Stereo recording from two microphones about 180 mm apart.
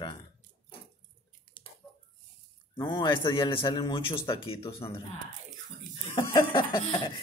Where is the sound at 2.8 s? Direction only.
20° left (ahead or behind).